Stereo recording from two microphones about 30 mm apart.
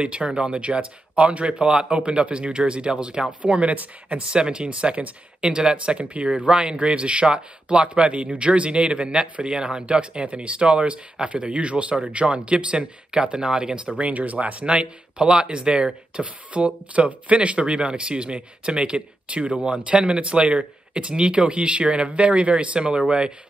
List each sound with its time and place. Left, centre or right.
0.0 s speech: right
4.3 s speech: right
5.4 s speech: right
13.8 s speech: right
22.8 s speech: right